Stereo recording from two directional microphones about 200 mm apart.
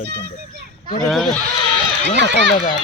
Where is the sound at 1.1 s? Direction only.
5° left (ahead or behind).